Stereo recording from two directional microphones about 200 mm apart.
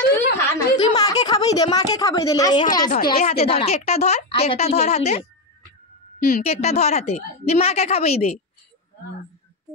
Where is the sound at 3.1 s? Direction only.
35° left (ahead or behind).